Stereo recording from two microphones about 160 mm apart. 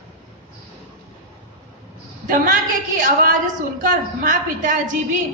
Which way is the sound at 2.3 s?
60° right (ahead or behind).